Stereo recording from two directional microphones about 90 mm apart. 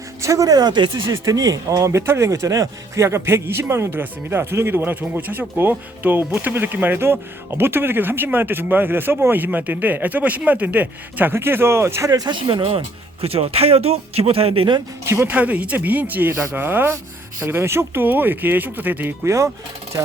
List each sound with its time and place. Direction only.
0.2 s speech: 35° right (ahead or behind); by 0.9 s 50° right (ahead or behind)
1.1 s speech: 35° right (ahead or behind)
12.3 s speech: 60° right (ahead or behind)
13.2 s speech: 90° right
15.0 s speech: 30° right (ahead or behind)
15.3 s speech: 15° right (ahead or behind)
19.2 s speech: 35° right (ahead or behind)